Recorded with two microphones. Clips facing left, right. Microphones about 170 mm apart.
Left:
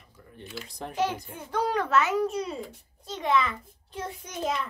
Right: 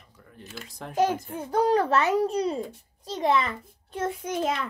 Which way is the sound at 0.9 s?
40° right (ahead or behind).